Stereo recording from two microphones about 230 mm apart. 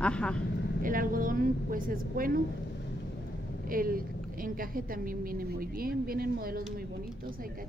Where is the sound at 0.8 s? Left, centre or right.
Right.